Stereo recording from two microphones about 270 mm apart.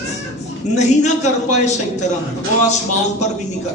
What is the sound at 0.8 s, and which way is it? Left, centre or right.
A man's voice, left.